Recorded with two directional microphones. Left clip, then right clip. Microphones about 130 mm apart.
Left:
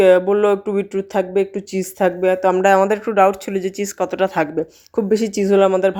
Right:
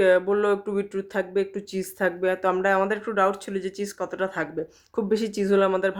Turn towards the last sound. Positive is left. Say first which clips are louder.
# left 7 dB
turn(degrees=30)  # may be behind; listen again after turning